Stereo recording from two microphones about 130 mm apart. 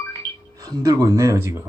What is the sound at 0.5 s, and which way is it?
Speech, 25° right (ahead or behind).